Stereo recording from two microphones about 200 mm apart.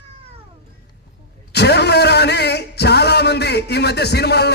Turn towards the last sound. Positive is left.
turn(degrees=55)  # may be behind; listen again after turning